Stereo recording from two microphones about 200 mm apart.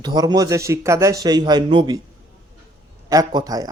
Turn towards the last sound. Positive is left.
turn(degrees=-20)  # may be behind; listen again after turning